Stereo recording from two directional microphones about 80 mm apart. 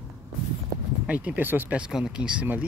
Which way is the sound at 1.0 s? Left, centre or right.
Centre.